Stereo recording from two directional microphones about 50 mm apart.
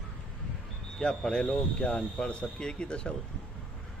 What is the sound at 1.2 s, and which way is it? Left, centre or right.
Speech, centre.